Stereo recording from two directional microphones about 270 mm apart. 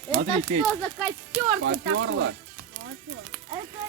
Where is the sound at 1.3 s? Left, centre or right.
Right.